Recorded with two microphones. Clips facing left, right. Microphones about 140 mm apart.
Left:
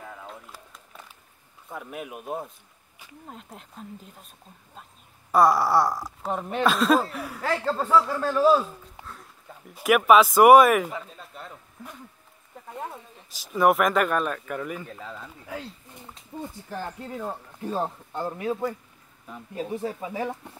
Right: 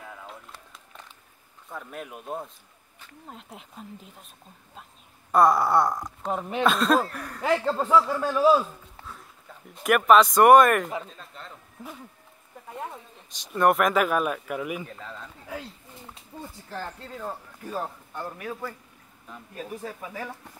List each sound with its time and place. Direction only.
0.0 s a sound: centre (ahead or behind)
1.7 s speech: 10° left (ahead or behind)
5.3 s speech: centre (ahead or behind)
7.4 s a man's voice: 20° right (ahead or behind)
7.7 s a man's voice: centre (ahead or behind)
9.0 s a sound: centre (ahead or behind)
9.7 s speech: 5° left (ahead or behind)
12.6 s speech: centre (ahead or behind)
14.9 s speech: 5° left (ahead or behind)
16.6 s speech: 15° left (ahead or behind)
17.6 s speech: 25° left (ahead or behind)